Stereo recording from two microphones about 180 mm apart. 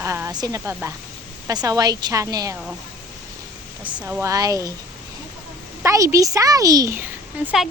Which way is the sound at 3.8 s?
25° right (ahead or behind).